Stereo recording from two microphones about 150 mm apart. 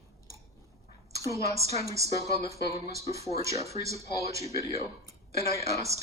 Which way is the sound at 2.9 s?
20° right (ahead or behind).